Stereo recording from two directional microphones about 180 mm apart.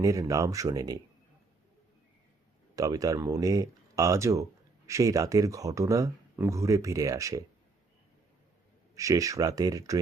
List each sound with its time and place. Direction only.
0.0 s speech: 20° right (ahead or behind)
2.7 s speech: 20° right (ahead or behind)
9.0 s speech: 15° right (ahead or behind)